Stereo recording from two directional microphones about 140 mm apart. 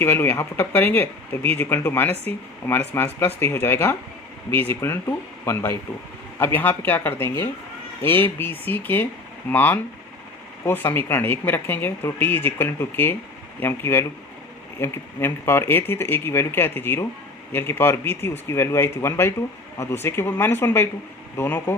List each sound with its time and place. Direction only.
0.0 s speech: 15° left (ahead or behind)